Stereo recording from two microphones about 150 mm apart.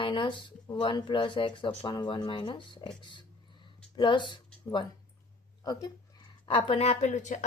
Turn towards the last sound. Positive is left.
turn(degrees=50)  # may be behind; listen again after turning